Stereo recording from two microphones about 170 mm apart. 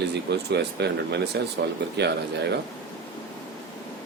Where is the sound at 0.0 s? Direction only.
80° right.